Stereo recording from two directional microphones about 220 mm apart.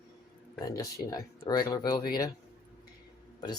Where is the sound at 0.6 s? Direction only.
15° left (ahead or behind).